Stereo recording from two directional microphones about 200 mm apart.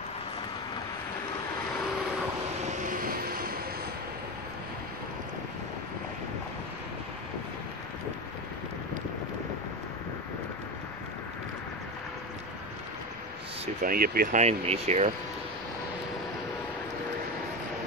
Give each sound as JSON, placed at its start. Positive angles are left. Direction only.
{"t": 2.6, "sound": "vehicle", "side_deg": -40}
{"t": 13.8, "sound": "speech", "side_deg": -50}